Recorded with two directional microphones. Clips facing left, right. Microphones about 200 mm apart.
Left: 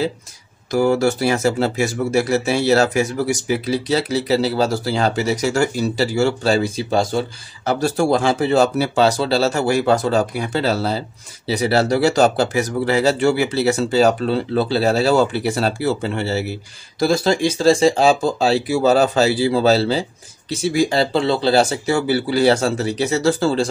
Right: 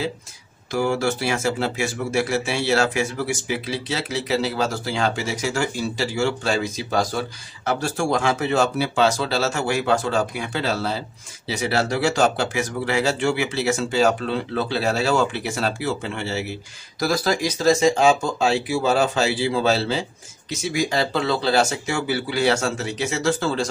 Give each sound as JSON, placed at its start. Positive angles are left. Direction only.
{"t": 0.7, "sound": "speech", "side_deg": 40}
{"t": 17.0, "sound": "speech", "side_deg": 25}